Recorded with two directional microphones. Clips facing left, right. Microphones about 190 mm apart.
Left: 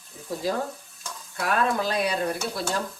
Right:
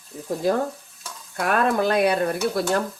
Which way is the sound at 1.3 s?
55° right (ahead or behind).